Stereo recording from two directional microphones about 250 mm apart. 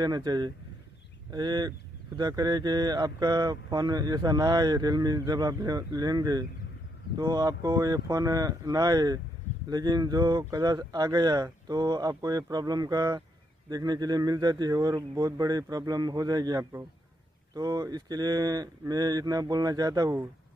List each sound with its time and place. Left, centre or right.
0.0 s speech: centre